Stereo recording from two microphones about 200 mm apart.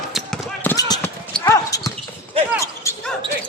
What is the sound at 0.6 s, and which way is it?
Basketball bounce, 15° left (ahead or behind).